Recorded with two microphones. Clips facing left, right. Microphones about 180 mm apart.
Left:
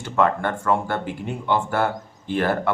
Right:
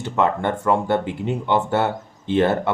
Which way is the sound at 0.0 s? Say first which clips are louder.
Right 1 dB; 20° right (ahead or behind).